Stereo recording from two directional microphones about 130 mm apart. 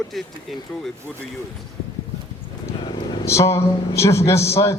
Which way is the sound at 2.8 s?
35° left (ahead or behind).